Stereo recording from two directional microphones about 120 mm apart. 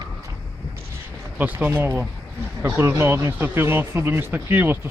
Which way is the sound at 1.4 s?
15° right (ahead or behind).